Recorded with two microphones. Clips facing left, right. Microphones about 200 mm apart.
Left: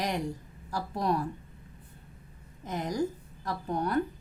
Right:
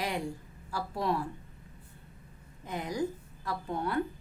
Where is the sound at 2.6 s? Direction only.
40° left (ahead or behind).